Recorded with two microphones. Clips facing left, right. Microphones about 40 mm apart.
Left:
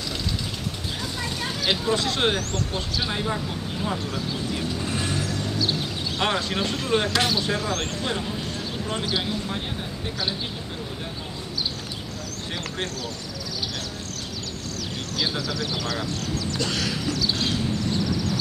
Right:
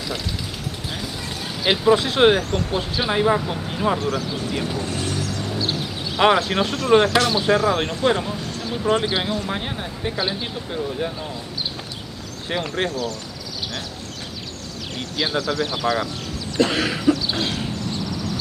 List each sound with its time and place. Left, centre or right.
1.6 s speech: centre
4.1 s speech: centre
6.1 s speech: centre
12.4 s speech: right
15.1 s speech: centre
17.4 s a sound: centre